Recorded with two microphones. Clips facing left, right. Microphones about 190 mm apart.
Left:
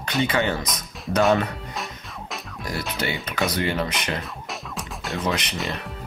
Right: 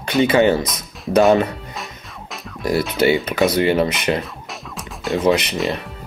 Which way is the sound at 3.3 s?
15° right (ahead or behind).